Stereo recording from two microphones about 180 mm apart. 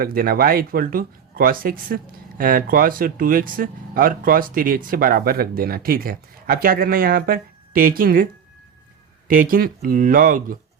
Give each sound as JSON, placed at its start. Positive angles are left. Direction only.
{"t": 0.0, "sound": "speech", "side_deg": -55}